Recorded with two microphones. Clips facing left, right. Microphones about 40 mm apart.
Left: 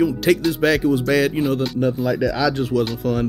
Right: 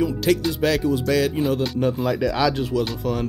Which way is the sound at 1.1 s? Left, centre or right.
Left.